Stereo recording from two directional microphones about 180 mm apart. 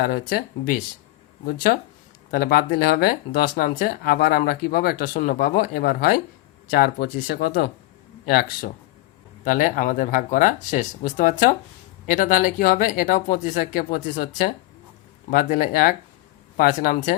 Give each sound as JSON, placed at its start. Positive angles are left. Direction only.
{"t": 0.0, "sound": "speech", "side_deg": 55}